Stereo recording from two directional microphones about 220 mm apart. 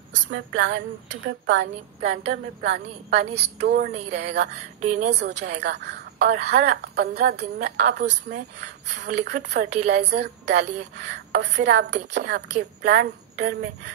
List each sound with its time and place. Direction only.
0.1 s a woman's voice: 55° right (ahead or behind)
3.2 s a woman's voice: 30° right (ahead or behind)
3.6 s a woman's voice: 45° right (ahead or behind)
3.9 s speech: 30° right (ahead or behind)
5.6 s a woman's voice: 50° right (ahead or behind)
8.5 s a woman's voice: 50° right (ahead or behind)